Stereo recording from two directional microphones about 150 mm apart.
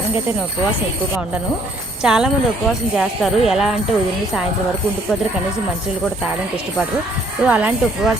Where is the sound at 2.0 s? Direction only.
5° right (ahead or behind).